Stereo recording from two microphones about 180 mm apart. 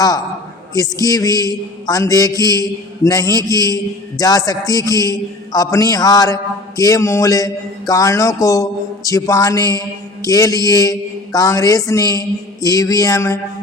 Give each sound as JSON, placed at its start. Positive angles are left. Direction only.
{"t": 1.0, "sound": "a man's voice", "side_deg": 20}